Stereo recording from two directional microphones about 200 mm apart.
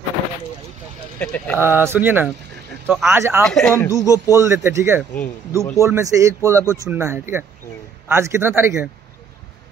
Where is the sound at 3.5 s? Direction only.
5° left (ahead or behind).